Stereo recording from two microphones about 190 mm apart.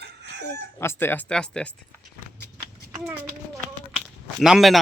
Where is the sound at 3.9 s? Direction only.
Centre (ahead or behind).